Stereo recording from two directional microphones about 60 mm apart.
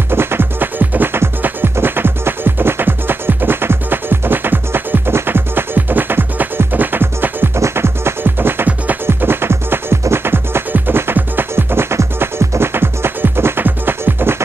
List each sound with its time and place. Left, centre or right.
0.1 s music: right
7.5 s music: right